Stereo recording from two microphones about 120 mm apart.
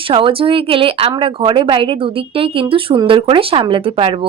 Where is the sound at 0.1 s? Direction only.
45° right (ahead or behind).